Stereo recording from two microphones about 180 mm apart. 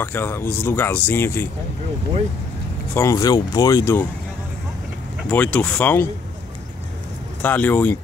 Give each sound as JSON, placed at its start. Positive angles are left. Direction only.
{"t": 0.0, "sound": "speech", "side_deg": 10}
{"t": 2.9, "sound": "speech", "side_deg": 15}
{"t": 5.3, "sound": "speech", "side_deg": 10}
{"t": 7.4, "sound": "speech", "side_deg": 10}